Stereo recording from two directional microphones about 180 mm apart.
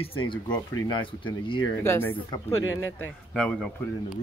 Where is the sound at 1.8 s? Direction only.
10° left (ahead or behind).